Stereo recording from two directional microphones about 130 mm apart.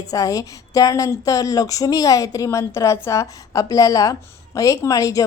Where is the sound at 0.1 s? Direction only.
25° left (ahead or behind).